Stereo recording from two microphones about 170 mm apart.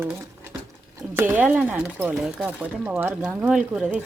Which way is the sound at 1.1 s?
10° right (ahead or behind).